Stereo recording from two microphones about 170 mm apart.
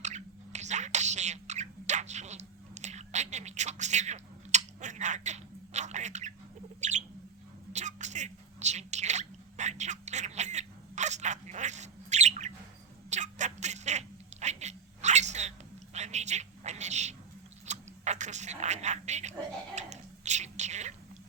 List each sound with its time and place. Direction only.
0.0 s whispering: 45° right (ahead or behind)
6.7 s bird: 45° right (ahead or behind)
7.7 s drip: 45° right (ahead or behind)
13.1 s a sound: 45° right (ahead or behind)
19.7 s whispering: 45° right (ahead or behind)